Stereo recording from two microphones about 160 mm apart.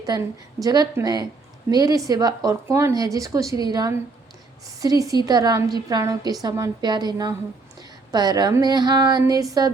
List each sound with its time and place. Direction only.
0.6 s speech: 25° right (ahead or behind)